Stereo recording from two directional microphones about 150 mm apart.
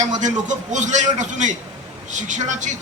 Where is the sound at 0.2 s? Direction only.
55° right (ahead or behind).